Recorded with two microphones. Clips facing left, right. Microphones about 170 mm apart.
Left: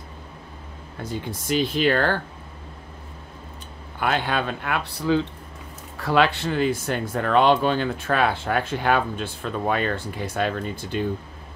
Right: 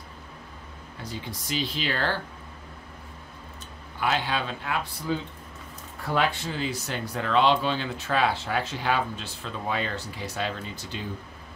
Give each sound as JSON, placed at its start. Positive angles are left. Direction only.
{"t": 1.0, "sound": "speech", "side_deg": 50}
{"t": 4.0, "sound": "speech", "side_deg": 55}
{"t": 5.9, "sound": "speech", "side_deg": 85}